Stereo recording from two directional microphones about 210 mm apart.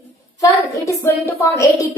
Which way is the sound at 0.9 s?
15° left (ahead or behind).